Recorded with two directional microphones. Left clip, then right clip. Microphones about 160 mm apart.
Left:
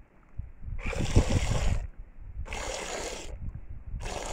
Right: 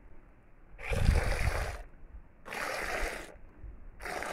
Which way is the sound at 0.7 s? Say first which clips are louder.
Left 3 dB; 25° left (ahead or behind).